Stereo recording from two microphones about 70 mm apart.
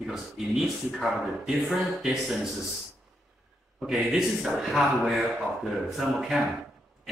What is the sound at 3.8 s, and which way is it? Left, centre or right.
Speech, centre.